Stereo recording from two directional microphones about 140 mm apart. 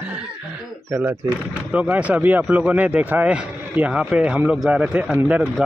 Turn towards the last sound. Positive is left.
turn(degrees=-10)  # may be behind; listen again after turning